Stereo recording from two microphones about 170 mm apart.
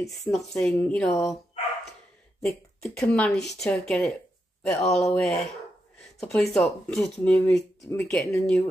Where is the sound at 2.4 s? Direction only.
Centre (ahead or behind).